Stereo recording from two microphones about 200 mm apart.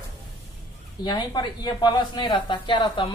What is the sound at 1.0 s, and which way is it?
Speech, 20° left (ahead or behind).